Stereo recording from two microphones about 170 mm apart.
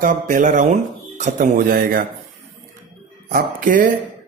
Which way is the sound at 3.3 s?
55° right (ahead or behind).